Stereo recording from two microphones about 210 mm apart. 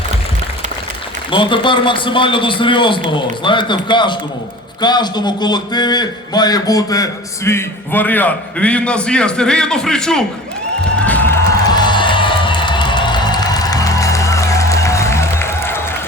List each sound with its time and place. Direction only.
1.3 s a man's voice: 25° left (ahead or behind); by 10.2 s 5° left (ahead or behind)
10.9 s music: 5° left (ahead or behind)
11.7 s music: 20° left (ahead or behind)